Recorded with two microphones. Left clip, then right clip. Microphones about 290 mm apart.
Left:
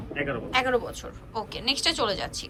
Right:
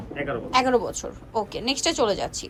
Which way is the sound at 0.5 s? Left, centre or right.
Right.